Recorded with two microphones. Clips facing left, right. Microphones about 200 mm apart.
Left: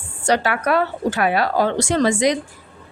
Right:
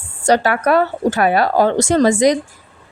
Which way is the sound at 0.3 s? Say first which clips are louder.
Right 4 dB; 40° right (ahead or behind).